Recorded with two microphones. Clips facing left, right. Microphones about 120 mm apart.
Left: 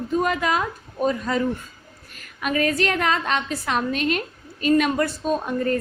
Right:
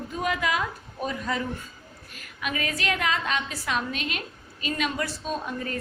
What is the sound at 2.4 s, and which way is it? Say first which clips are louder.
A woman's voice: left 7 dB; 45° left (ahead or behind).